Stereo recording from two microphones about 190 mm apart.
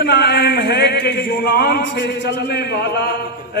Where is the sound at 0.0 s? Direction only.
60° left (ahead or behind).